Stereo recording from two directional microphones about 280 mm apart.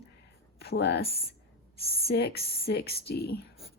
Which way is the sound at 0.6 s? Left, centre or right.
Left.